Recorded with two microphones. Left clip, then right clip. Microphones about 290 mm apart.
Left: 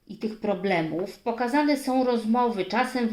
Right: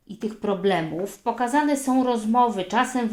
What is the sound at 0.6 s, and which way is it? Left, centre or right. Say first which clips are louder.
Speech: right 4 dB; right.